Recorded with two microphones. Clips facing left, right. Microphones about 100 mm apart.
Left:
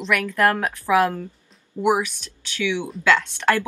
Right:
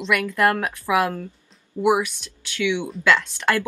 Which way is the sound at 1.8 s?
20° left (ahead or behind).